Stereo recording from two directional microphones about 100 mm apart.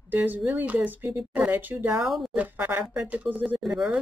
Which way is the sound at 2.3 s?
15° right (ahead or behind).